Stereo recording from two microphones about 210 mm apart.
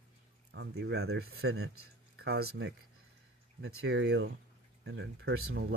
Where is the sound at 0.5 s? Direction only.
55° right (ahead or behind).